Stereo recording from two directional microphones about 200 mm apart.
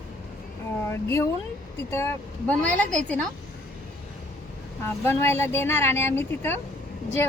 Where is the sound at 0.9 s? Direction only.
15° left (ahead or behind).